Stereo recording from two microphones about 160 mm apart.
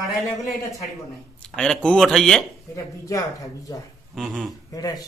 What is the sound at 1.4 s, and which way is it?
Speech, 5° left (ahead or behind).